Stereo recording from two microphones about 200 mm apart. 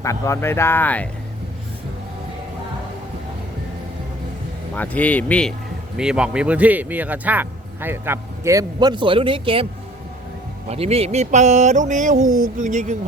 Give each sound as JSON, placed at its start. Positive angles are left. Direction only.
{"t": 0.0, "sound": "speech", "side_deg": 15}
{"t": 4.7, "sound": "a man's voice", "side_deg": 10}
{"t": 10.7, "sound": "speech", "side_deg": -30}